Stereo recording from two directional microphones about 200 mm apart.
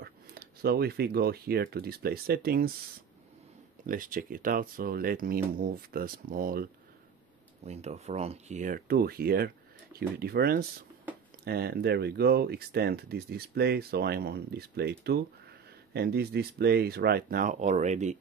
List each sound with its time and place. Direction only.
0.0 s speech: 50° right (ahead or behind)
3.8 s speech: 45° right (ahead or behind)
7.6 s speech: 35° right (ahead or behind)